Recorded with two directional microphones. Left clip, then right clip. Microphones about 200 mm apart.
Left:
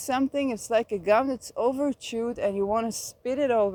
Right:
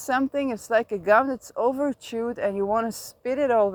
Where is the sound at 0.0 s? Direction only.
15° right (ahead or behind).